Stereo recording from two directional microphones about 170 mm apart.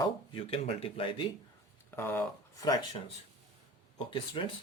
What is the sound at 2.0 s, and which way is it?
Speech, 15° left (ahead or behind).